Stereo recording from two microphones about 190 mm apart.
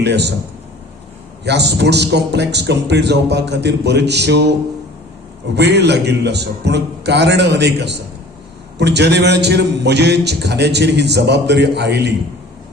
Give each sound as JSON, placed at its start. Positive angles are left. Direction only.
{"t": 0.0, "sound": "a man's voice", "side_deg": -60}
{"t": 1.5, "sound": "a man's voice", "side_deg": -60}
{"t": 5.5, "sound": "a man's voice", "side_deg": -60}